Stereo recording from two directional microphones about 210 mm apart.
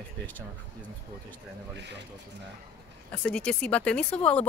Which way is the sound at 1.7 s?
55° right (ahead or behind).